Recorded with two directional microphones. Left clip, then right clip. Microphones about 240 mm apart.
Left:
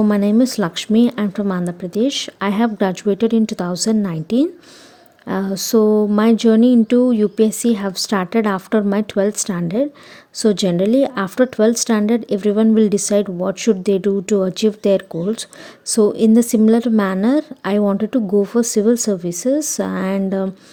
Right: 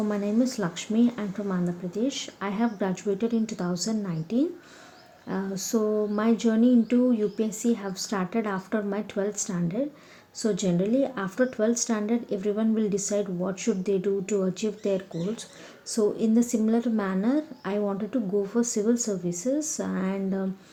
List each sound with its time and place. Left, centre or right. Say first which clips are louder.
0.1 s speech: left 10 dB; left